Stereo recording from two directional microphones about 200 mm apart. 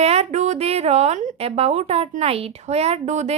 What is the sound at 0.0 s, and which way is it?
Speech, 30° right (ahead or behind).